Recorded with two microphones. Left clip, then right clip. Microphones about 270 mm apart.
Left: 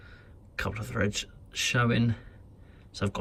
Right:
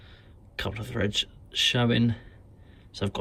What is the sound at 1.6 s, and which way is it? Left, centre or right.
Speech, centre.